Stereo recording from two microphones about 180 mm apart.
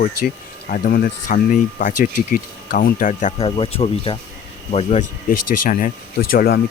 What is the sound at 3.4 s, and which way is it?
Speech, 30° left (ahead or behind).